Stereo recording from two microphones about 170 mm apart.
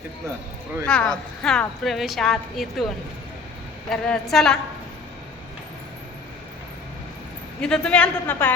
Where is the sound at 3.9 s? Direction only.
Centre (ahead or behind).